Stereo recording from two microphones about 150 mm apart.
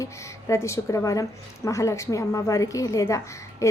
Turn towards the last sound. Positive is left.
turn(degrees=20)  # may be behind; listen again after turning